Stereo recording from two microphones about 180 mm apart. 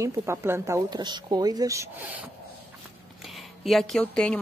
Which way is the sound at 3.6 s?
Centre (ahead or behind).